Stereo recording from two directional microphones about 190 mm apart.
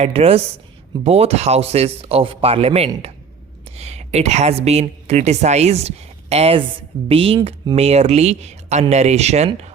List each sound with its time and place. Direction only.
0.0 s speech: 30° right (ahead or behind)